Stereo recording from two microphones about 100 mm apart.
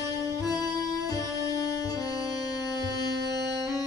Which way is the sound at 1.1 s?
40° left (ahead or behind).